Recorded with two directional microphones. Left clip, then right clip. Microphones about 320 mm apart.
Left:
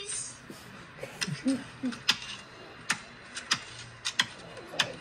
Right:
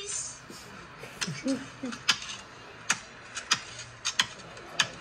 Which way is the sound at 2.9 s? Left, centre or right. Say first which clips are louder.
Right 2 dB; centre.